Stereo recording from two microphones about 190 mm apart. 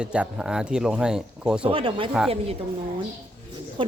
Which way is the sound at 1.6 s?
30° right (ahead or behind).